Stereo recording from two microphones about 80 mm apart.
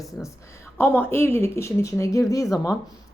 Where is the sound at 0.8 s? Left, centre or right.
Left.